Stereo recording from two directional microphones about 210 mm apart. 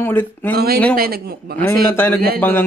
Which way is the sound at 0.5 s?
45° right (ahead or behind).